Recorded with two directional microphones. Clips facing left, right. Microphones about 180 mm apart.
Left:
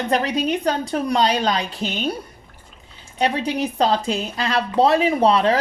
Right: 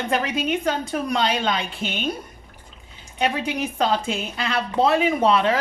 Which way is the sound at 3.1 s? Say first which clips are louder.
Left 3 dB; 35° left (ahead or behind).